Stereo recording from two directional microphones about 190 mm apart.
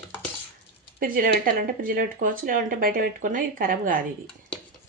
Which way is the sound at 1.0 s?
50° right (ahead or behind).